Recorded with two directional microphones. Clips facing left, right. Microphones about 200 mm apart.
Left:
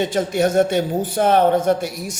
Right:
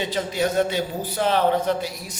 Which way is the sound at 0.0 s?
50° left (ahead or behind).